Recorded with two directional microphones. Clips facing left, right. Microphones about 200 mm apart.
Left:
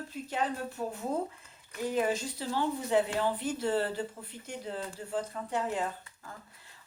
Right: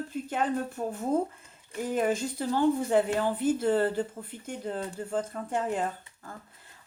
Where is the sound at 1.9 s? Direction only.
50° right (ahead or behind).